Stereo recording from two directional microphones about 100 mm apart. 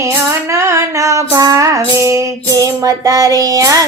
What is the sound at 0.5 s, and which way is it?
Female singing, 30° right (ahead or behind).